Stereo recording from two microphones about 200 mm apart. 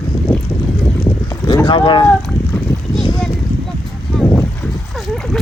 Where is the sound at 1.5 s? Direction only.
25° left (ahead or behind).